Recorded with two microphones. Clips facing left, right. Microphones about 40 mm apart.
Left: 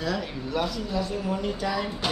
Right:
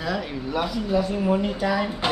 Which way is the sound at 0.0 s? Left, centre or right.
Centre.